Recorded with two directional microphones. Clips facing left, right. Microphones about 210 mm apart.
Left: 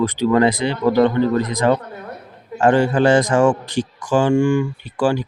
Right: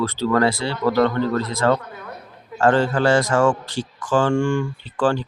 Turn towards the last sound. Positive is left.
turn(degrees=10)  # may be behind; listen again after turning